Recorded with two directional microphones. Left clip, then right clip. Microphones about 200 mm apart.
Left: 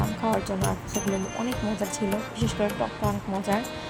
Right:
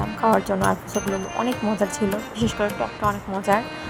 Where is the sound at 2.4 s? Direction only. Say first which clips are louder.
Right 4 dB; 15° right (ahead or behind).